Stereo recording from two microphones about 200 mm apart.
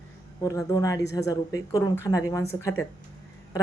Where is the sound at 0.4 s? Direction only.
15° left (ahead or behind).